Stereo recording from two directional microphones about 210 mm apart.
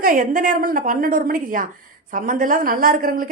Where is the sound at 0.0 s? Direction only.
40° right (ahead or behind).